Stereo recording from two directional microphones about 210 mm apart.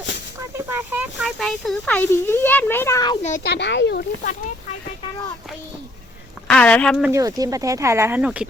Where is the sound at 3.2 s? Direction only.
35° left (ahead or behind).